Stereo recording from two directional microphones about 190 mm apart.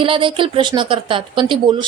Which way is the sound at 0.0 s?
25° right (ahead or behind).